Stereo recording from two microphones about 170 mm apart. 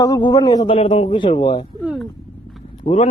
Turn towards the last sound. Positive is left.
turn(degrees=35)  # may be behind; listen again after turning